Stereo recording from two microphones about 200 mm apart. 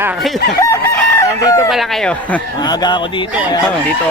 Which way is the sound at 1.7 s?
Centre (ahead or behind).